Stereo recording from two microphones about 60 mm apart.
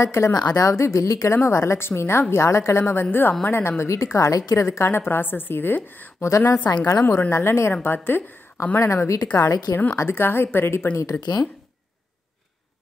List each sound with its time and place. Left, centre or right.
0.0 s a woman's voice: left
1.0 s speech: left
1.3 s a woman's voice: left
2.8 s a woman's voice: left
4.6 s a woman's voice: left
6.2 s a woman's voice: left
6.7 s a woman's voice: left
7.1 s a woman's voice: left
7.8 s a woman's voice: left
8.7 s a woman's voice: left
10.0 s a woman's voice: left
11.0 s speech: left